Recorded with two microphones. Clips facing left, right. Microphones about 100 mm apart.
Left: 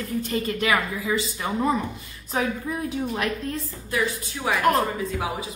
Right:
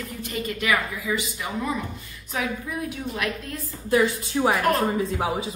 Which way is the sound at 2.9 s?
30° left (ahead or behind).